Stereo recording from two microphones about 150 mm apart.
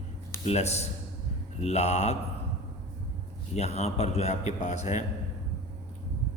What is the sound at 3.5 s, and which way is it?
A man's voice, 45° left (ahead or behind).